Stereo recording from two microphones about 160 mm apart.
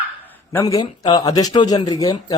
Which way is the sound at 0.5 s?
20° left (ahead or behind).